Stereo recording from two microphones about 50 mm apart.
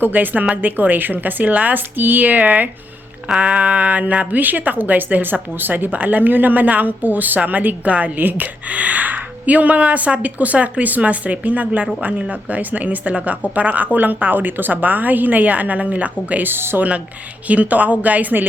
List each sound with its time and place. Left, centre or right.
0.0 s speech: right
16.5 s speech: right
17.5 s speech: right